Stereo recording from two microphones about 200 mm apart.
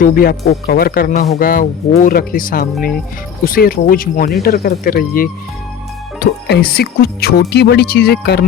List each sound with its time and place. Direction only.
0.0 s speech: 45° left (ahead or behind)